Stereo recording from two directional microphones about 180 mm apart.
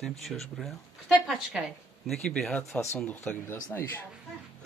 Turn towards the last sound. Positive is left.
turn(degrees=10)  # may be behind; listen again after turning